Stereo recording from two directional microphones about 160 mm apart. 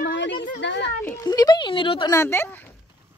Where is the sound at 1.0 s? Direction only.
20° left (ahead or behind).